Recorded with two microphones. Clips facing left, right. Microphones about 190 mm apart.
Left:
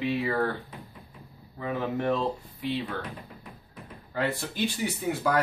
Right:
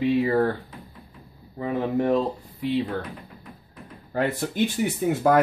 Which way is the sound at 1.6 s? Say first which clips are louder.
Right 5 dB; 35° right (ahead or behind).